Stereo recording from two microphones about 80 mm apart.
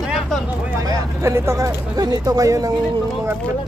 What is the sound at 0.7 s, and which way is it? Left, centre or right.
Speech, right.